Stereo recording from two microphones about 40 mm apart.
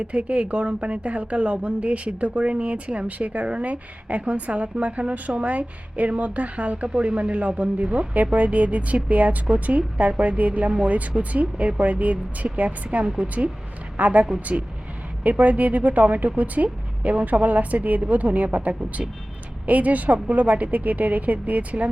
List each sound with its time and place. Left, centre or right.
0.0 s a woman's voice: right